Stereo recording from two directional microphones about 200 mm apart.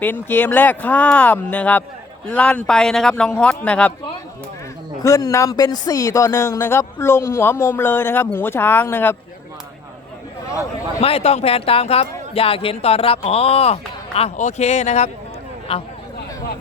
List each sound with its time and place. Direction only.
0.0 s speech: 10° left (ahead or behind)
5.0 s speech: 15° left (ahead or behind)
11.0 s speech: 30° left (ahead or behind)